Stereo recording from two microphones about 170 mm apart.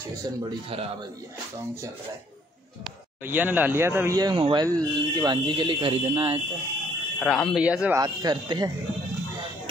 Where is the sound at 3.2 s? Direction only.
10° right (ahead or behind); by 6.3 s 35° right (ahead or behind).